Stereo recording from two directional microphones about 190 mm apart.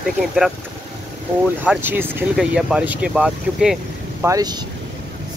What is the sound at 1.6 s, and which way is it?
Speech, 10° right (ahead or behind).